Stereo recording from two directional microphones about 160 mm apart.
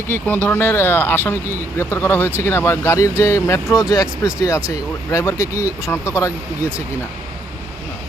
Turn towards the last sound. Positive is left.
turn(degrees=-10)  # may be behind; listen again after turning